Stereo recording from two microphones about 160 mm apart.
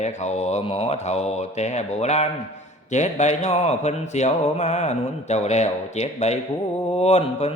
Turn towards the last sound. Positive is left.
turn(degrees=40)  # may be behind; listen again after turning